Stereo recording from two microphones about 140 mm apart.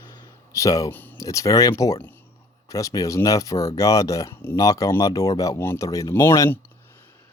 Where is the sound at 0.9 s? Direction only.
15° left (ahead or behind).